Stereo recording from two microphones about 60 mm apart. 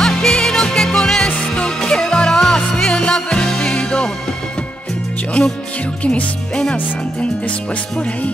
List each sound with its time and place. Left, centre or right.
0.0 s music: centre
6.0 s music: centre
6.7 s speech: centre